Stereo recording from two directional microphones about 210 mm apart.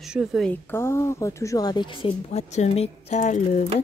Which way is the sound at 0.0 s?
Centre (ahead or behind).